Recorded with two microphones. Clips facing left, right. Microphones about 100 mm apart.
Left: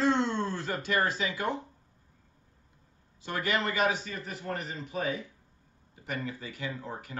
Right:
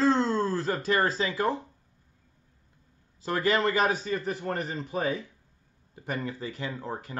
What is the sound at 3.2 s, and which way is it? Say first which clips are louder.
A man's voice: right 5 dB; 30° right (ahead or behind).